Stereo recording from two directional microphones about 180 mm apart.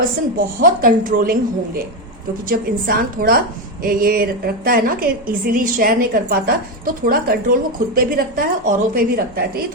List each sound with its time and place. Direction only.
0.3 s a woman's voice: 50° right (ahead or behind)